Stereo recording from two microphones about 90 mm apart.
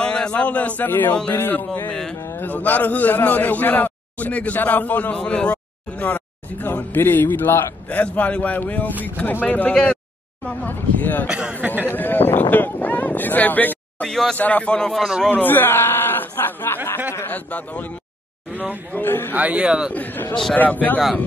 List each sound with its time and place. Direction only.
0.0 s a man's voice: 10° left (ahead or behind); by 2.4 s 30° left (ahead or behind)
2.4 s a man's voice: 20° left (ahead or behind)
11.2 s speech: 10° right (ahead or behind)
11.6 s speech: 20° right (ahead or behind)
11.9 s speech: 20° left (ahead or behind)
14.0 s speech: 5° left (ahead or behind)
14.3 s a man's voice: 15° left (ahead or behind)
15.3 s a man's voice: 20° left (ahead or behind)
17.1 s a sound: 25° left (ahead or behind)
17.5 s a man's voice: 15° left (ahead or behind)
18.5 s speech: 20° right (ahead or behind)
18.9 s a man's voice: 25° left (ahead or behind)
19.3 s speech: 15° right (ahead or behind)
19.9 s a man's voice: 20° left (ahead or behind)